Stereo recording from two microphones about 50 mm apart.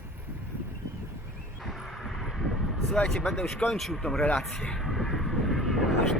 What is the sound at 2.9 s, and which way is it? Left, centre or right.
Speech, centre.